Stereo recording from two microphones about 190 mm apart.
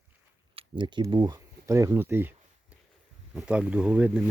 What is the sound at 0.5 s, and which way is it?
Speech, 25° right (ahead or behind).